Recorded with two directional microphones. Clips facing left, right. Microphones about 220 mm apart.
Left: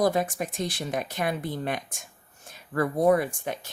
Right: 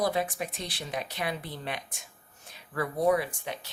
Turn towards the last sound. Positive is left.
turn(degrees=50)  # may be behind; listen again after turning